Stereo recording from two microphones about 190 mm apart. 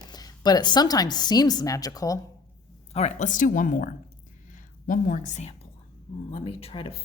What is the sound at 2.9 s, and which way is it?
A woman's voice, 35° left (ahead or behind).